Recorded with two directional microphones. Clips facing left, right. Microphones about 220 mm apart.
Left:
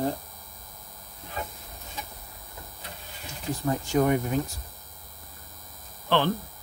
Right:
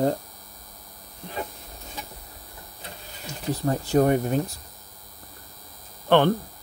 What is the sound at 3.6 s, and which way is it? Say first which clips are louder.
Speech: right 3 dB; 35° right (ahead or behind).